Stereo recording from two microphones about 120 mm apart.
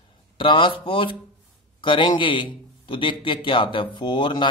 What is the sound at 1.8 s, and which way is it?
Speech, 40° left (ahead or behind).